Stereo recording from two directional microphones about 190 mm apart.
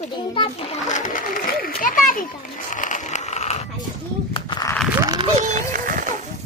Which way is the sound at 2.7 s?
40° left (ahead or behind).